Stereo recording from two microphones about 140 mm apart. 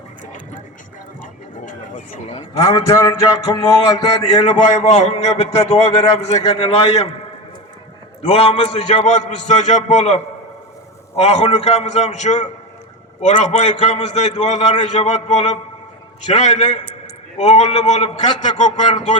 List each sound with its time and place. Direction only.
2.6 s a man's voice: 25° left (ahead or behind)
3.9 s a man's voice: 55° left (ahead or behind)
8.3 s a man's voice: 40° left (ahead or behind)
11.2 s a man's voice: 50° left (ahead or behind)